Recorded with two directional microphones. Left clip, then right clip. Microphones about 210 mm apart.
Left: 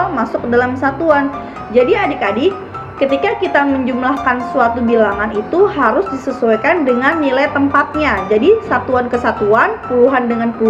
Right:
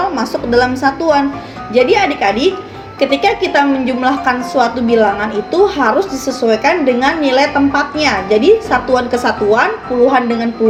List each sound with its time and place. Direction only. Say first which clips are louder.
0.2 s a woman's voice: right 1 dB; 30° right (ahead or behind)